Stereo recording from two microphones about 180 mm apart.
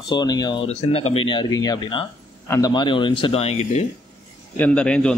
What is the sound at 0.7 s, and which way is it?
A man's voice, 35° left (ahead or behind).